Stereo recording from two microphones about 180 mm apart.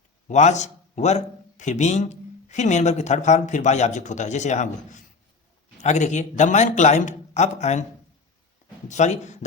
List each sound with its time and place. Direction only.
0.3 s a man's voice: 40° left (ahead or behind)
8.9 s a man's voice: 40° left (ahead or behind)